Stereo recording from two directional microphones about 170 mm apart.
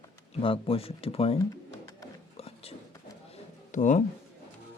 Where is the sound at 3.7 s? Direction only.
45° left (ahead or behind).